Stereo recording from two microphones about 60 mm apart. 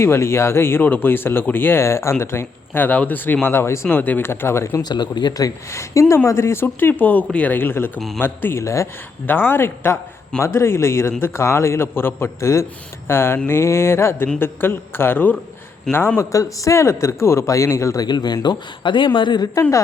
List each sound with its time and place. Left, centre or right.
0.0 s a man's voice: left
2.7 s speech: left
3.4 s a man's voice: left
3.8 s speech: left
4.2 s a man's voice: left
5.7 s a man's voice: left
7.6 s speech: left
8.6 s a man's voice: left
9.2 s a man's voice: left
16.3 s a man's voice: left
19.6 s a woman's voice: left